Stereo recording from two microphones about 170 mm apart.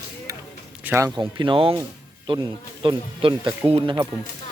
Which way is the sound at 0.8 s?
15° right (ahead or behind).